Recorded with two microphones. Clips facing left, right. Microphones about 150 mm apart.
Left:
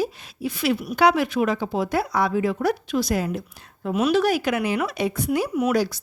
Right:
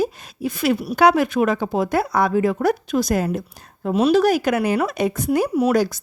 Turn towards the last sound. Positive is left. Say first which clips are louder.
# right 3 dB
turn(degrees=-50)  # may be behind; listen again after turning